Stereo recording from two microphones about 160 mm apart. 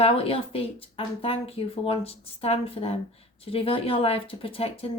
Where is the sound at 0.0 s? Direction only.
35° left (ahead or behind).